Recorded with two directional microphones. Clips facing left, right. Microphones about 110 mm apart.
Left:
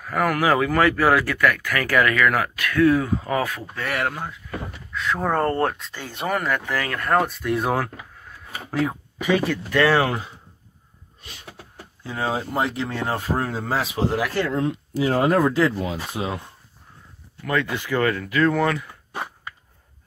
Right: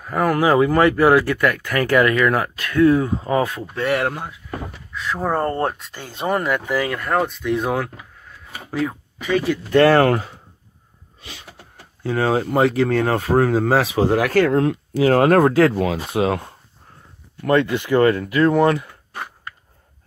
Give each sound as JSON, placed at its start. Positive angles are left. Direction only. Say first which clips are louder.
{"t": 0.0, "sound": "speech", "louder": "right 3 dB", "side_deg": -25}
{"t": 4.9, "sound": "speech", "louder": "right 1 dB", "side_deg": -5}
{"t": 6.5, "sound": "speech", "louder": "right 4 dB", "side_deg": -10}
{"t": 9.8, "sound": "speech", "louder": "right 5 dB", "side_deg": -55}
{"t": 11.1, "sound": "a sound", "louder": "right 5 dB", "side_deg": -90}
{"t": 12.0, "sound": "speech", "louder": "right 7 dB", "side_deg": -65}
{"t": 17.4, "sound": "speech", "louder": "right 7 dB", "side_deg": -40}